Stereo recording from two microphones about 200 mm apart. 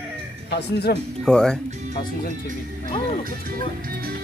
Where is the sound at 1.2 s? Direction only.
5° left (ahead or behind).